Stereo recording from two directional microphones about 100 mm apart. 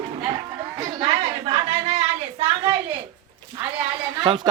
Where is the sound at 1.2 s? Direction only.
90° right.